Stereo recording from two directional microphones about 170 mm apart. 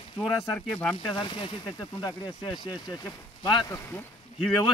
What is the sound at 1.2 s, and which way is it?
Speech, 30° left (ahead or behind).